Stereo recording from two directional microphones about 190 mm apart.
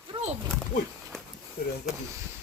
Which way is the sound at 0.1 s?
35° right (ahead or behind).